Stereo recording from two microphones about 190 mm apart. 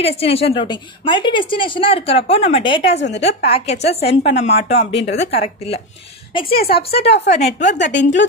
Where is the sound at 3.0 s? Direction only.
65° left (ahead or behind).